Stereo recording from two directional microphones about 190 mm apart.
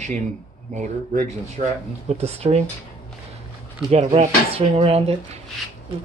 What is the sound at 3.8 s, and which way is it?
Speech, 30° right (ahead or behind).